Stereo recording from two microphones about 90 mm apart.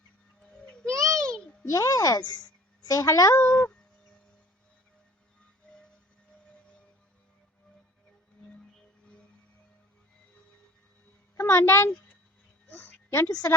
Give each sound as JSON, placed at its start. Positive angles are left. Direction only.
{"t": 0.9, "sound": "a sound", "side_deg": -35}
{"t": 1.6, "sound": "a woman's voice", "side_deg": 35}
{"t": 3.4, "sound": "speech", "side_deg": 15}
{"t": 11.3, "sound": "a woman's voice", "side_deg": 30}
{"t": 13.1, "sound": "a woman's voice", "side_deg": 30}